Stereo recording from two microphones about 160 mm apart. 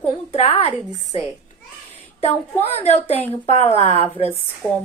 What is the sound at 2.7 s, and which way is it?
A woman's voice, 40° left (ahead or behind).